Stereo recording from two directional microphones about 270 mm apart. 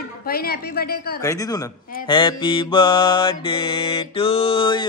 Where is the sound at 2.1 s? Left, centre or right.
Centre.